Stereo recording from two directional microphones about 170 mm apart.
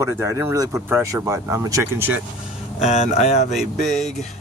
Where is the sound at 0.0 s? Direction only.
15° right (ahead or behind).